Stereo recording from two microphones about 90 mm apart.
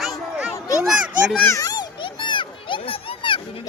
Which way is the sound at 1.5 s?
40° left (ahead or behind).